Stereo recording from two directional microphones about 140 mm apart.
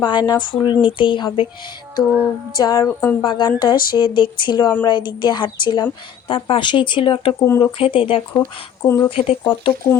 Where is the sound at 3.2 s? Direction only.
30° left (ahead or behind).